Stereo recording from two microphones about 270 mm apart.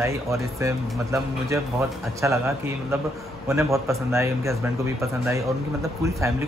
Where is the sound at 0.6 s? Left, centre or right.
Centre.